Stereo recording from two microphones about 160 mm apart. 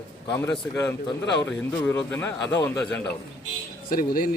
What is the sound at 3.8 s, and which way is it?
Speech, 65° left (ahead or behind).